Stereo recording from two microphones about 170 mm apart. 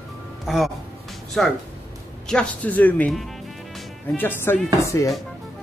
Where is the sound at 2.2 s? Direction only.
5° left (ahead or behind).